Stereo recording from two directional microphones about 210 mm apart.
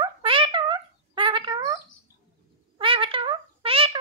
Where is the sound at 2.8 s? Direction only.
25° right (ahead or behind).